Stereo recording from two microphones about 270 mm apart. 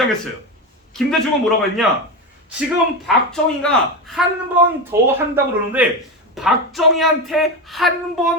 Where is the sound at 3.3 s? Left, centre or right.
Centre.